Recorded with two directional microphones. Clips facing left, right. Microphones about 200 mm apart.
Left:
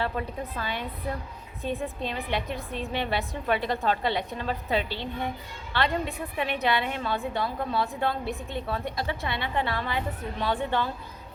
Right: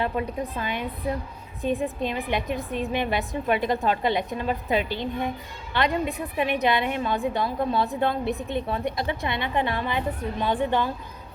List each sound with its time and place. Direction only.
0.0 s a woman's voice: 15° right (ahead or behind)